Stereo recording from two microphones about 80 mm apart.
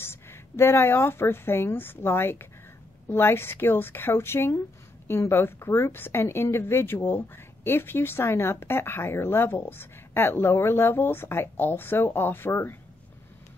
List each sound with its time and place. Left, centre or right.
0.0 s speech: left